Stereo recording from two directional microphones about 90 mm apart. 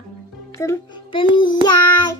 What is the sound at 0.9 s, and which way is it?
Child singing, 70° left (ahead or behind).